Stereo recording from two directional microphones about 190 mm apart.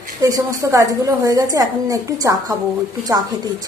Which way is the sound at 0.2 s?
20° right (ahead or behind).